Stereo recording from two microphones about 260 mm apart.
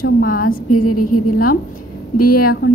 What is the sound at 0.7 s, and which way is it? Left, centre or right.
Speech, left.